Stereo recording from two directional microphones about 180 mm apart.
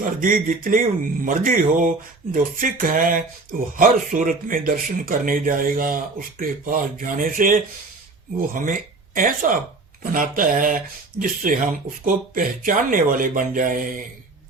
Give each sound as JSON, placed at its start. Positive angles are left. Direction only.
{"t": 0.0, "sound": "speech", "side_deg": -50}